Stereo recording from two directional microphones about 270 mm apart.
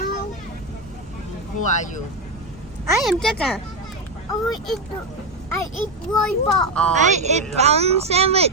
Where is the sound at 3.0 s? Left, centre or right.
Centre.